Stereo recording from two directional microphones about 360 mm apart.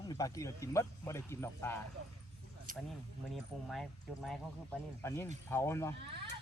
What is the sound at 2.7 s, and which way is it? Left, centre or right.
Speech, right.